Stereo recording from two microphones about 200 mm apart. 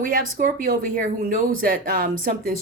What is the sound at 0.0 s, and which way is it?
Speech, 45° right (ahead or behind).